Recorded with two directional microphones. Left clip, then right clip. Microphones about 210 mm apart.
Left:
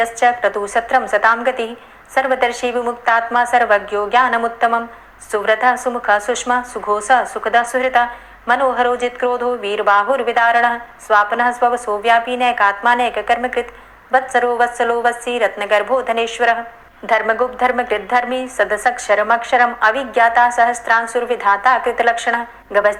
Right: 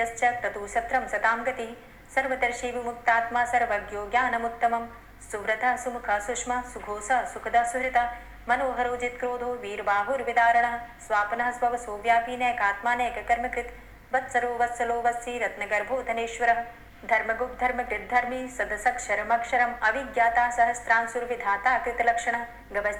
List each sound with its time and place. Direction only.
0.0 s a woman's voice: 30° left (ahead or behind)